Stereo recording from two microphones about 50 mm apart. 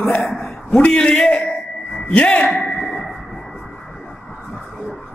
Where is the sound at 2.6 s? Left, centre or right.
Centre.